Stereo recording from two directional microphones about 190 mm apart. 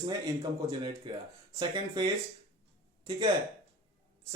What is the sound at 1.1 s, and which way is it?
Speech, 25° right (ahead or behind).